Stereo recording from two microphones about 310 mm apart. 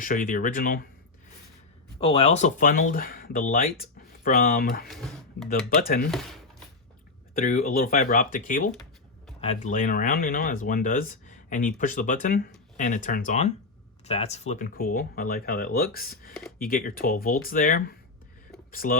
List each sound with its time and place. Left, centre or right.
0.0 s speech: left
2.0 s speech: centre
4.9 s speech: centre
5.5 s speech: left
6.1 s speech: centre
7.3 s speech: left